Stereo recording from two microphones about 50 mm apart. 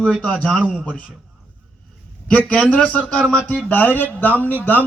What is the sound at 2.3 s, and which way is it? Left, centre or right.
A man's voice, left.